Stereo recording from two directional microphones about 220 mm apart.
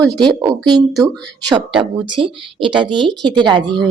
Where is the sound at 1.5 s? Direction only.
25° right (ahead or behind).